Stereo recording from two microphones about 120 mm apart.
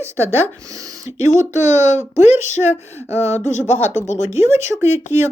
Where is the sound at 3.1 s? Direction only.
25° right (ahead or behind).